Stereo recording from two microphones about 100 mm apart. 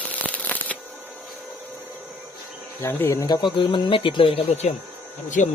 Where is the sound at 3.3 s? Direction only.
55° left (ahead or behind).